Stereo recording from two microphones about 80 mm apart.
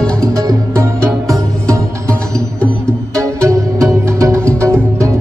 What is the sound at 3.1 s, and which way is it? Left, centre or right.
Music, right.